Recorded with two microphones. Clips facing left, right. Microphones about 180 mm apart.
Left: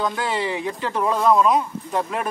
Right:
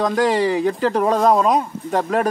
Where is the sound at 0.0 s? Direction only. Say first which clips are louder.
Right 7 dB; 40° right (ahead or behind).